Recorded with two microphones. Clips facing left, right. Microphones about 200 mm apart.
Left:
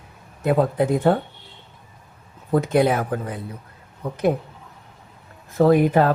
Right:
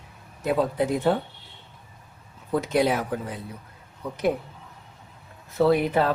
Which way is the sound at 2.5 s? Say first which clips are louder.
Left 4 dB; 55° left (ahead or behind).